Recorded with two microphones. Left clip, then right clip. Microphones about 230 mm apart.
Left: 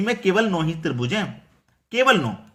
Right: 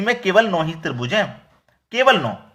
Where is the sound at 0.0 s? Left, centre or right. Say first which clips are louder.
Right 4 dB; centre.